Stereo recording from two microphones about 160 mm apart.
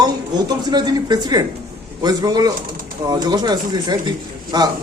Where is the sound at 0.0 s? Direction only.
25° right (ahead or behind).